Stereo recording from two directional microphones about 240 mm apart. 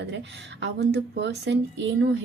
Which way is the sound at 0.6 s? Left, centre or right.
Right.